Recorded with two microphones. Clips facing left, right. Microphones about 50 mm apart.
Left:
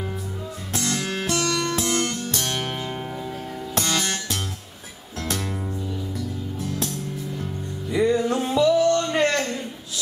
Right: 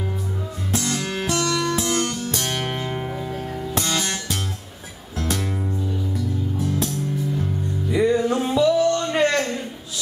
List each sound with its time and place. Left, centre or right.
0.7 s music: centre